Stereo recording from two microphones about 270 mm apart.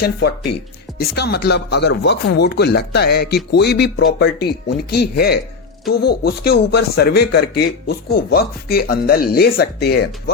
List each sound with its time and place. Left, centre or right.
0.0 s speech: left